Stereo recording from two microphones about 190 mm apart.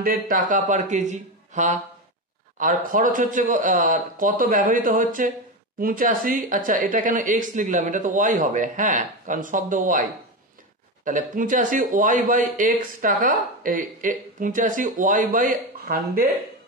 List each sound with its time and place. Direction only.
0.0 s speech: 45° right (ahead or behind)
11.1 s speech: 45° right (ahead or behind)